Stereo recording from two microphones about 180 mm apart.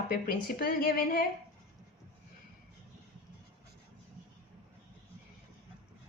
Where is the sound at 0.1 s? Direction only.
55° left (ahead or behind).